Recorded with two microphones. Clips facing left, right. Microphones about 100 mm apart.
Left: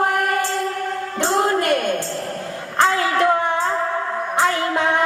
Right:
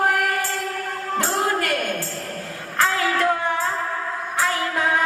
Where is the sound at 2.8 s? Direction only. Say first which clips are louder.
Left 3 dB; 20° left (ahead or behind).